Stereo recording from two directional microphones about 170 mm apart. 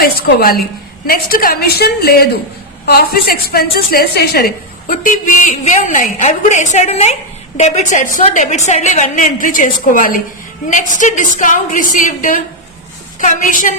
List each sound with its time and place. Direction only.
0.0 s a woman's voice: 65° left (ahead or behind)